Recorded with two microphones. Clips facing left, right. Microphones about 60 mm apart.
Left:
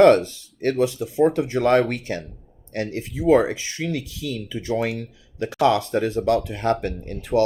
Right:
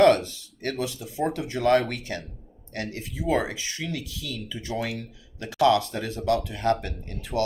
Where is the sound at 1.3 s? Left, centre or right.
Left.